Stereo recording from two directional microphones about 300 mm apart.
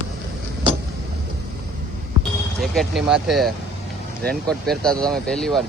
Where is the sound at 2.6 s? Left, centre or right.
Centre.